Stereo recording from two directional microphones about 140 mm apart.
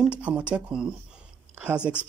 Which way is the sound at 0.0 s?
5° right (ahead or behind).